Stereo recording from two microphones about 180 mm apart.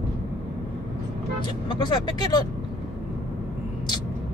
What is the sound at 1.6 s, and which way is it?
Speech, 25° left (ahead or behind).